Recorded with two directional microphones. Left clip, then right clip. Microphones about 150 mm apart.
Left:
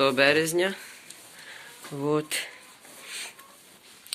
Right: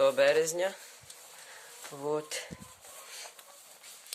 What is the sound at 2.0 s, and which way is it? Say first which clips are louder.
Speech: left 7 dB; 30° right (ahead or behind).